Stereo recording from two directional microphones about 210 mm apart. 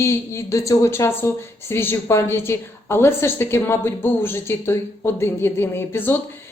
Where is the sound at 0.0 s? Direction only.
15° left (ahead or behind).